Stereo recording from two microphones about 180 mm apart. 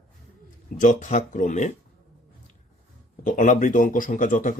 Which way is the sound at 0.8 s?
45° left (ahead or behind).